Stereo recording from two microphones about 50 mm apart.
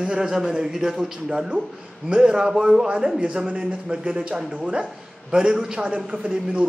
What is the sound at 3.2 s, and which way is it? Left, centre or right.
A man's voice, right.